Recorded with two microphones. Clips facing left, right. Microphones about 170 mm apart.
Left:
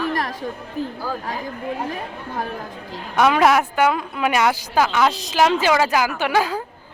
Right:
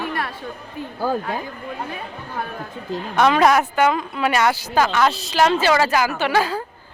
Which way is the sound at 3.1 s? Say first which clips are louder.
Even; 5° left (ahead or behind).